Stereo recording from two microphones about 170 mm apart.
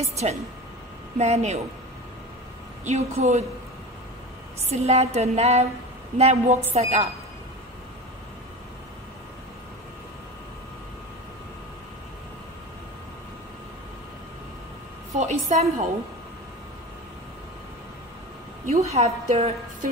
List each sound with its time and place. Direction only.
1.1 s a woman's voice: 40° right (ahead or behind)
2.8 s a woman's voice: 40° right (ahead or behind)
4.6 s a woman's voice: 40° right (ahead or behind)
15.1 s a woman's voice: 40° right (ahead or behind)
18.7 s a woman's voice: 40° right (ahead or behind)